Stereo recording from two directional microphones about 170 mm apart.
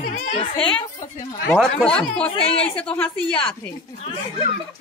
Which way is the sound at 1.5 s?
5° left (ahead or behind).